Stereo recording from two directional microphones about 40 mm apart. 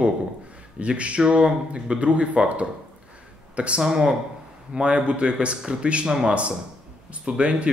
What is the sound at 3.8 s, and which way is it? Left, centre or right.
Speech, centre.